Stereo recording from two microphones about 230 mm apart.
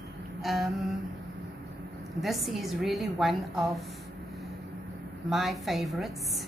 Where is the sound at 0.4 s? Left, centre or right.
Centre.